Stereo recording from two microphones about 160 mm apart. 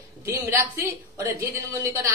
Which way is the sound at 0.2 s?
15° right (ahead or behind).